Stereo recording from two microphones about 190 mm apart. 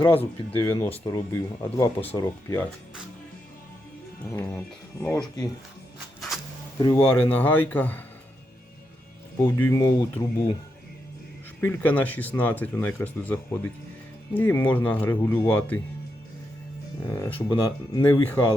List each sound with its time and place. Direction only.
0.1 s speech: 10° left (ahead or behind)
4.2 s speech: 15° left (ahead or behind)
6.1 s music: centre (ahead or behind)
6.7 s speech: 20° left (ahead or behind)
9.4 s speech: 10° left (ahead or behind)
11.6 s speech: 10° left (ahead or behind)
17.1 s speech: 15° left (ahead or behind)